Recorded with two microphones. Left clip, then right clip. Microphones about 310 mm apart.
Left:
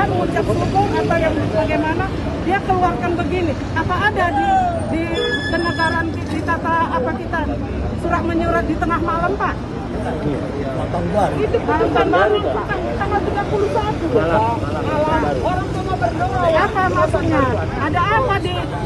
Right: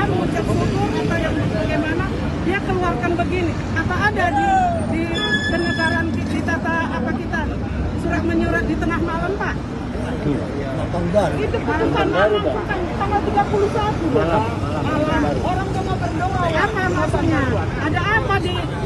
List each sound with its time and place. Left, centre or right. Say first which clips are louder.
11.9 s speech: left 2 dB; right